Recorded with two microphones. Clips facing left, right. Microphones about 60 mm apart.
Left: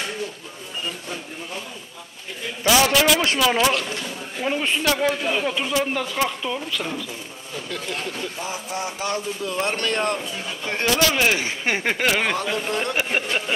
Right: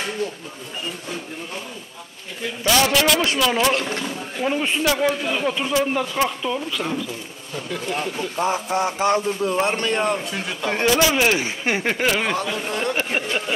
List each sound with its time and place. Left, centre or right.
2.6 s speech: centre
4.4 s speech: centre
8.4 s speech: right
9.6 s speech: centre
10.2 s speech: right
10.7 s speech: centre
11.7 s speech: centre
12.9 s speech: centre